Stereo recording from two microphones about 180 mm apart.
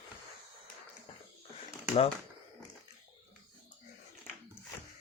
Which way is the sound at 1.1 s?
30° left (ahead or behind).